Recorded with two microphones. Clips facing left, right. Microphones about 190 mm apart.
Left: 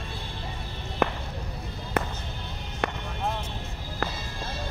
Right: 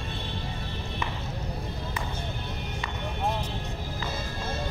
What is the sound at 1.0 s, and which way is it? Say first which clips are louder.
Music: left 11 dB; 60° left (ahead or behind).